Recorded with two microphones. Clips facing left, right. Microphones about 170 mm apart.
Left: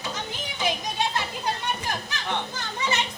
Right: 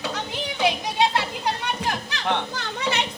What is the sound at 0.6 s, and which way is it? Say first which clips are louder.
Children playing: right 5 dB; 65° right (ahead or behind).